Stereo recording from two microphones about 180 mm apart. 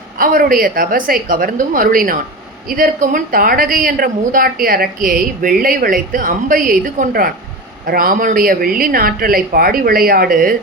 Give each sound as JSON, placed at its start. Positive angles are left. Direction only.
{"t": 0.2, "sound": "a woman's voice", "side_deg": -50}